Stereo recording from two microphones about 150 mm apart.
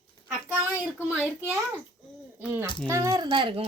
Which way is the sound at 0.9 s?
10° right (ahead or behind).